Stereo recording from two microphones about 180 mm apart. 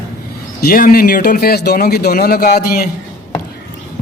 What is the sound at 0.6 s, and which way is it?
A man's voice, 50° left (ahead or behind).